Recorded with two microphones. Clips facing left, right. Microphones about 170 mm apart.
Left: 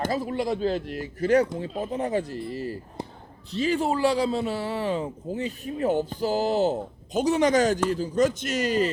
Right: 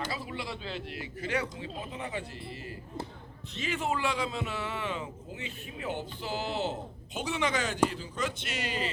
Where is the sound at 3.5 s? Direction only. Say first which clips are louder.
Left 8 dB; 35° left (ahead or behind).